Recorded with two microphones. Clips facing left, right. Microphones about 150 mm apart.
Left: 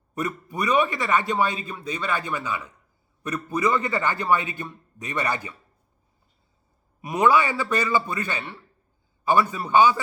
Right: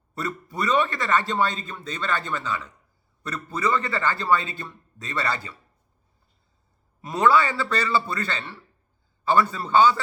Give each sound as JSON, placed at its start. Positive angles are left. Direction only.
{"t": 0.1, "sound": "a man's voice", "side_deg": 15}
{"t": 7.0, "sound": "a man's voice", "side_deg": 15}